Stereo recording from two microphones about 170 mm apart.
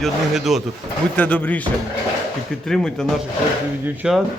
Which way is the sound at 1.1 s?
10° left (ahead or behind).